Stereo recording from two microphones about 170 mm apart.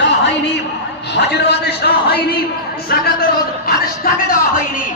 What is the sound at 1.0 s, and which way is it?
A man's voice, 85° left.